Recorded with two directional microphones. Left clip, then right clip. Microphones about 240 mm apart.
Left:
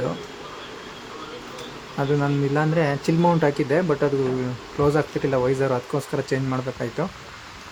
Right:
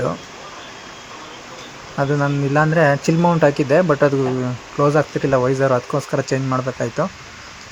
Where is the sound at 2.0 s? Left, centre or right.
Centre.